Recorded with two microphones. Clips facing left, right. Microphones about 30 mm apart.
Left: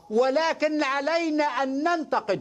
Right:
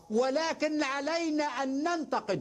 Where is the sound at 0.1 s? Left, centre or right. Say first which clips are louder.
Left 6 dB; centre.